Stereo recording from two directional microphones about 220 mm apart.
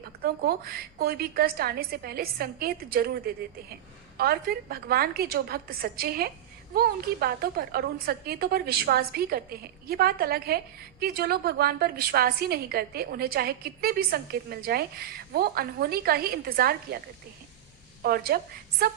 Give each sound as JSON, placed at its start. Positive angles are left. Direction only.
{"t": 0.0, "sound": "a woman's voice", "side_deg": -45}
{"t": 18.0, "sound": "a woman's voice", "side_deg": -45}